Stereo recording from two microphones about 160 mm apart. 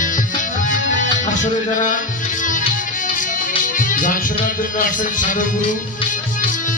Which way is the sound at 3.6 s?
55° left (ahead or behind).